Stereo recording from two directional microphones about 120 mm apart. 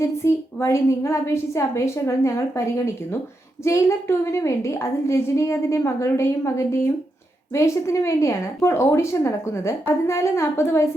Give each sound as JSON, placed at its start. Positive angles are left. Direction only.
{"t": 0.0, "sound": "a woman's voice", "side_deg": 20}